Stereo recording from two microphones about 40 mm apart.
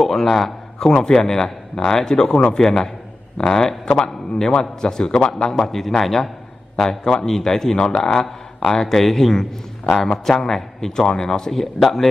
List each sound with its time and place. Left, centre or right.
0.0 s a man's voice: centre